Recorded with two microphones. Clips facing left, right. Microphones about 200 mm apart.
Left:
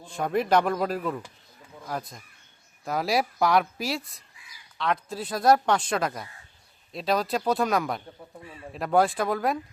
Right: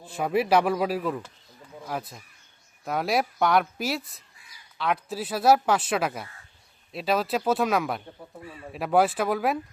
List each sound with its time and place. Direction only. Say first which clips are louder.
0.0 s speech: right 1 dB; 5° right (ahead or behind)